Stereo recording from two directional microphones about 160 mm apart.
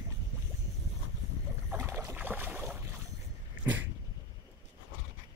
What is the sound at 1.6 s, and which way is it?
Boat, 15° right (ahead or behind).